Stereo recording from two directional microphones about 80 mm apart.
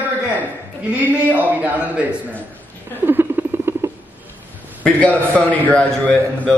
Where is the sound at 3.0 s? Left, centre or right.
Right.